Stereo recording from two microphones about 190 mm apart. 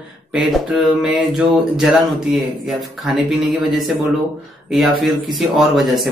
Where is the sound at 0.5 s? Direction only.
Centre (ahead or behind).